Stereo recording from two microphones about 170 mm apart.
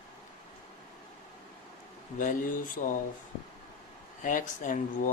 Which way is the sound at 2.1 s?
50° left (ahead or behind).